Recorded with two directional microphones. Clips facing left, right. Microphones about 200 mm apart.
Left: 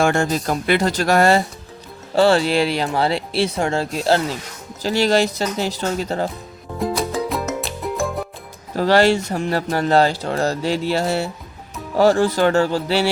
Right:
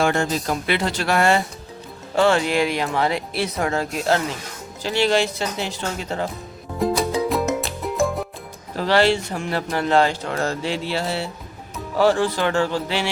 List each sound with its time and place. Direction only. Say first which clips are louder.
0.0 s a man's voice: left 2 dB; 45° left (ahead or behind)
6.7 s music: right 1 dB; centre (ahead or behind)
8.7 s a man's voice: left 3 dB; 45° left (ahead or behind)